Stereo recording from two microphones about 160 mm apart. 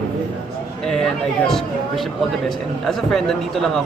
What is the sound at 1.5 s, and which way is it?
A man's voice, centre (ahead or behind).